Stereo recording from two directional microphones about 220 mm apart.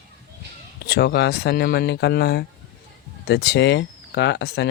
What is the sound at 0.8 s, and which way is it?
Speech, 45° left (ahead or behind).